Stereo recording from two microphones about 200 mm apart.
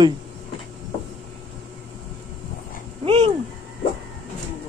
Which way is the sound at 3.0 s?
30° right (ahead or behind).